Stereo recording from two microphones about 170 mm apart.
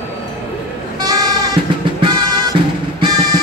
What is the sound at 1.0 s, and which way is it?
Sheep, 20° right (ahead or behind).